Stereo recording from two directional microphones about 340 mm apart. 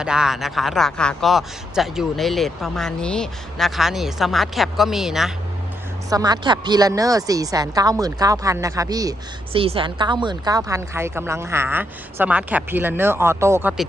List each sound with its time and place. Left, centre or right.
0.0 s a woman's voice: centre